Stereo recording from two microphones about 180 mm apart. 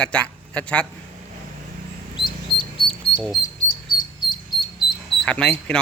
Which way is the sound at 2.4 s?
25° right (ahead or behind).